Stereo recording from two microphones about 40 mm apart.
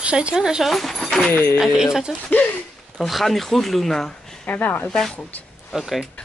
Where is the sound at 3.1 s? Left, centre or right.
Centre.